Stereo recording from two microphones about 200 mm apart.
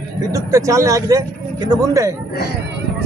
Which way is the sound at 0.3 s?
15° right (ahead or behind).